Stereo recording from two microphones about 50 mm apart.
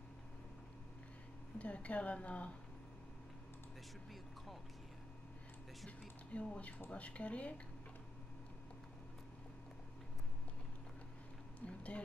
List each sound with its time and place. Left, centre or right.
1.6 s a woman's voice: left
5.9 s a woman's voice: left
11.6 s a sound: left